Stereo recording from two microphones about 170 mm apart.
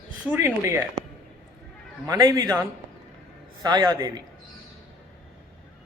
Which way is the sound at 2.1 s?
20° right (ahead or behind).